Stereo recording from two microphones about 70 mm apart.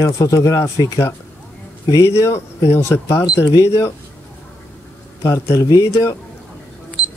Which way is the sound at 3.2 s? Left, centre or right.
Left.